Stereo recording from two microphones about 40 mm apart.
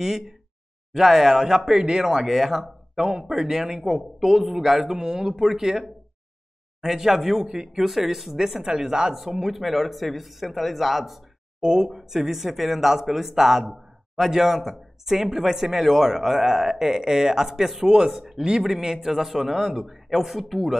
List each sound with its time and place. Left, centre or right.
0.0 s speech: centre
8.6 s speech: centre
11.6 s speech: centre